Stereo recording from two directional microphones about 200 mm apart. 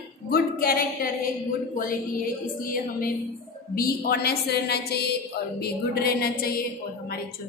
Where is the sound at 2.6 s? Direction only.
45° left (ahead or behind).